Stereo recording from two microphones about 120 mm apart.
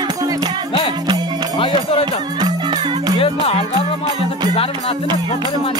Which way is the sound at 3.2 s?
50° left (ahead or behind).